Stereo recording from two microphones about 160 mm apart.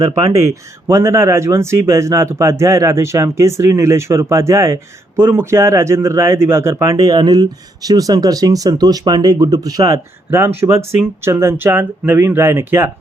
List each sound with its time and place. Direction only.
0.1 s speech: 20° right (ahead or behind)